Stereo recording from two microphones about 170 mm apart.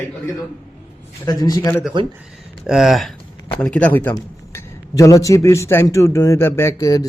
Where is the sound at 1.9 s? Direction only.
30° right (ahead or behind).